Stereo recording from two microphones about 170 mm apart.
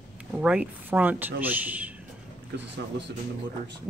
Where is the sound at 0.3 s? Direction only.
5° right (ahead or behind).